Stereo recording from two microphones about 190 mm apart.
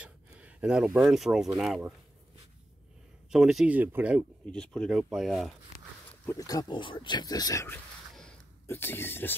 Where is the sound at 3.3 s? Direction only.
Centre (ahead or behind).